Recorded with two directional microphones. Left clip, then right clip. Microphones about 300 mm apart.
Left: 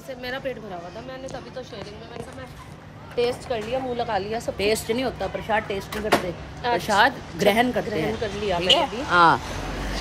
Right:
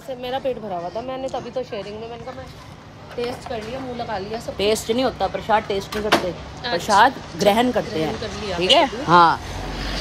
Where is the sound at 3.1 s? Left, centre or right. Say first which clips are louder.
Left 3 dB; left.